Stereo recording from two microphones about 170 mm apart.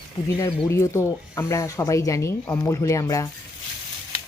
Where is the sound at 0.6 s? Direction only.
15° left (ahead or behind).